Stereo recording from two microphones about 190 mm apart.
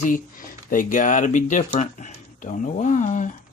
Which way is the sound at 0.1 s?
45° left (ahead or behind).